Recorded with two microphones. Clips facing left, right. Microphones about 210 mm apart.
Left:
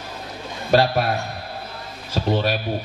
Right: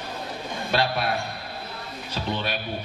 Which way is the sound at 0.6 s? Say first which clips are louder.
Left 7 dB; 45° left (ahead or behind).